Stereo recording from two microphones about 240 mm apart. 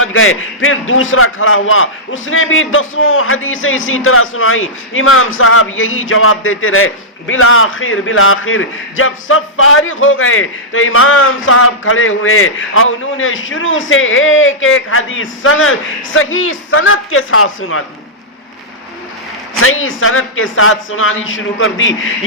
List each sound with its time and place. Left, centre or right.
0.0 s a man's voice: left
19.5 s a man's voice: left